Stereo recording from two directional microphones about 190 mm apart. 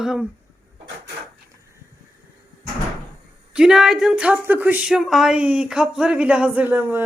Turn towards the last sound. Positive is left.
turn(degrees=-10)  # may be behind; listen again after turning